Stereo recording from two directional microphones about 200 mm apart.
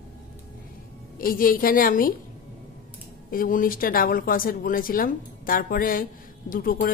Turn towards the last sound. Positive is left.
turn(degrees=45)  # may be behind; listen again after turning